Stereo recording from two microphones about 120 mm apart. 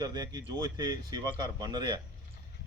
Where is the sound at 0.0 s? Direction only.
35° right (ahead or behind).